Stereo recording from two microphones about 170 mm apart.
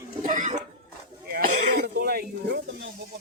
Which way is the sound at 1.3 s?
65° right (ahead or behind).